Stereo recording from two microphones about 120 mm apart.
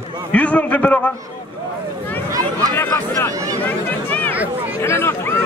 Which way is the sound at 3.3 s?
25° right (ahead or behind).